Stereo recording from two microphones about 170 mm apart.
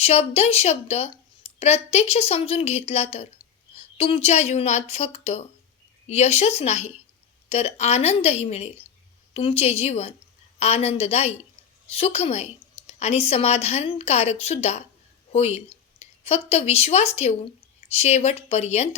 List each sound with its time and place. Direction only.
0.0 s a woman's voice: 35° left (ahead or behind)